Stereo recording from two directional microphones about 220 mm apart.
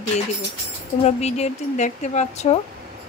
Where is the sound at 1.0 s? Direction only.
30° left (ahead or behind).